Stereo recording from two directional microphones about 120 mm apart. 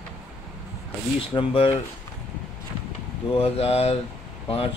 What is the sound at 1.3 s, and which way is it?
Speech, 50° left (ahead or behind).